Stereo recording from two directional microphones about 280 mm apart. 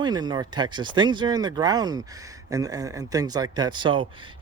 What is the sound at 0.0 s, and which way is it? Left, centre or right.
Speech, centre.